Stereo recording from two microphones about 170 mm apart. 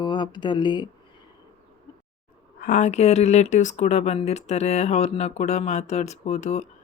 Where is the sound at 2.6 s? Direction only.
50° left (ahead or behind).